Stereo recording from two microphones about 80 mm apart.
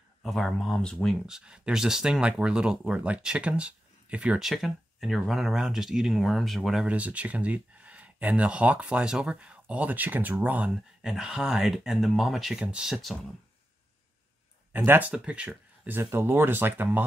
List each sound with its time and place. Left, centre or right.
0.2 s speech: centre
1.2 s speech: centre
4.4 s speech: centre
6.9 s speech: centre
11.0 s speech: centre
15.0 s speech: centre
16.0 s speech: right